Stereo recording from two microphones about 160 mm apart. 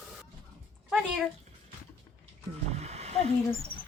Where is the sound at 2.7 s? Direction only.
45° right (ahead or behind).